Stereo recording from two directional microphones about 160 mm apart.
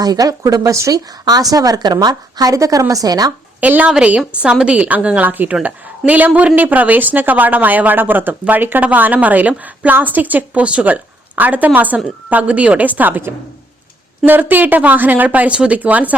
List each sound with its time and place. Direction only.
0.0 s speech: 20° right (ahead or behind)
3.6 s speech: 10° right (ahead or behind)